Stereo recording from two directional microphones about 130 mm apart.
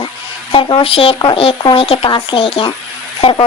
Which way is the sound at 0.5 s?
40° left (ahead or behind).